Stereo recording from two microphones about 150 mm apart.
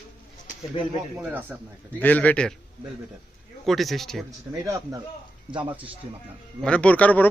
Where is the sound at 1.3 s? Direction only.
10° right (ahead or behind).